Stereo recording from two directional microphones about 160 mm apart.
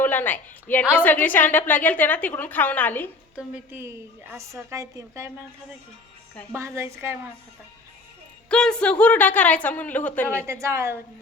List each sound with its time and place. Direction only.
0.0 s a woman's voice: 10° left (ahead or behind)
3.3 s a woman's voice: 10° right (ahead or behind)
6.7 s a woman's voice: 15° right (ahead or behind)
8.4 s a woman's voice: 5° left (ahead or behind)
10.4 s a woman's voice: 15° right (ahead or behind)